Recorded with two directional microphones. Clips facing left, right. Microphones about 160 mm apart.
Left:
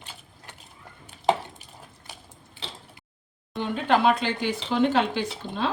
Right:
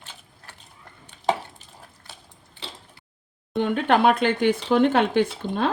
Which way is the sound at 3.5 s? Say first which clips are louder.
Right 3 dB; 60° right (ahead or behind).